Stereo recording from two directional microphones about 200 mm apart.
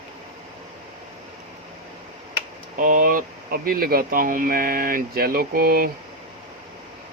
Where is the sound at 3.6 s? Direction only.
50° right (ahead or behind).